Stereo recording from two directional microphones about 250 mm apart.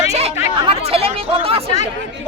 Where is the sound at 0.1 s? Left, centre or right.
Right.